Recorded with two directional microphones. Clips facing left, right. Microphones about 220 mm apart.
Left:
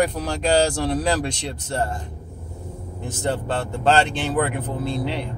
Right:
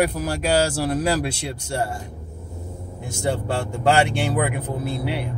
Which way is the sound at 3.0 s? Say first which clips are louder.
Even; 10° right (ahead or behind).